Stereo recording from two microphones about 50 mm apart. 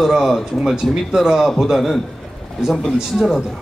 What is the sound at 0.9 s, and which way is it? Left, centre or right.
Speech, centre.